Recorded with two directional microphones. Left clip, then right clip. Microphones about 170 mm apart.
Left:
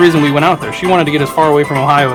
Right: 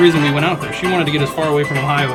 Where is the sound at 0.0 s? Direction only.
25° left (ahead or behind).